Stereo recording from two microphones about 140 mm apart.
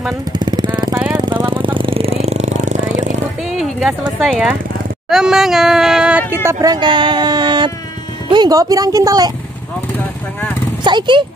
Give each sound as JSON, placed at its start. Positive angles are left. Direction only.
{"t": 0.3, "sound": "jackhammer", "side_deg": -30}
{"t": 1.1, "sound": "a sound", "side_deg": -35}
{"t": 3.4, "sound": "a sound", "side_deg": 0}
{"t": 4.2, "sound": "speech", "side_deg": 0}
{"t": 6.4, "sound": "speech", "side_deg": -25}
{"t": 10.8, "sound": "speech", "side_deg": -35}